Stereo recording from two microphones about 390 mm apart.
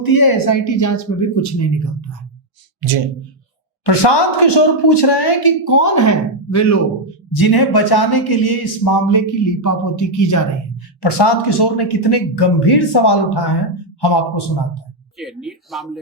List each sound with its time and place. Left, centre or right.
0.0 s speech: left
3.8 s speech: left
7.3 s a man's voice: left
11.0 s speech: left
15.2 s speech: centre